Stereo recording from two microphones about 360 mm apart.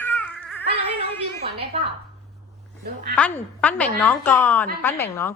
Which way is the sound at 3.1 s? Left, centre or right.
Centre.